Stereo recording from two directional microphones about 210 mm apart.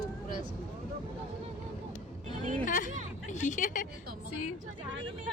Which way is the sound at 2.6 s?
40° left (ahead or behind).